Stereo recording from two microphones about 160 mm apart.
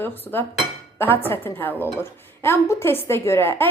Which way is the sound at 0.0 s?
15° left (ahead or behind).